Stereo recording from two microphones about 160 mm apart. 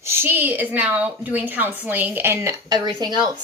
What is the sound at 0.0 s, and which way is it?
A woman's voice, 15° right (ahead or behind).